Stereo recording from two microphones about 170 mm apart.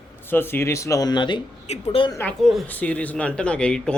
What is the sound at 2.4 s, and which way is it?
Speech, centre (ahead or behind).